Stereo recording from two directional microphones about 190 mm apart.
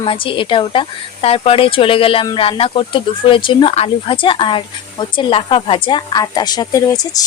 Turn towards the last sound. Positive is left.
turn(degrees=20)  # may be behind; listen again after turning